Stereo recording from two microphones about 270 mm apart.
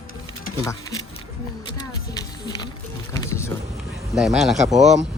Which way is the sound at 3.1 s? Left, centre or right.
Centre.